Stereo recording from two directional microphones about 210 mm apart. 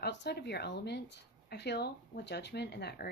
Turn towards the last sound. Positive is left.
turn(degrees=50)  # may be behind; listen again after turning